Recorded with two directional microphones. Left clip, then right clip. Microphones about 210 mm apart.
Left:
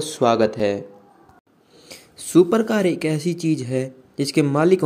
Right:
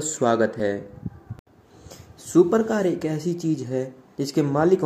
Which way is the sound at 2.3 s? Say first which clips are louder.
Left 2 dB; 45° left (ahead or behind).